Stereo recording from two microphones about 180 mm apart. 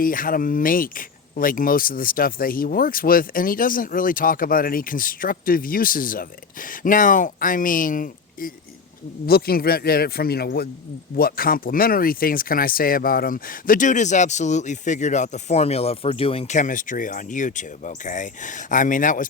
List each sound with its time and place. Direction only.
0.0 s a man's voice: 50° left (ahead or behind)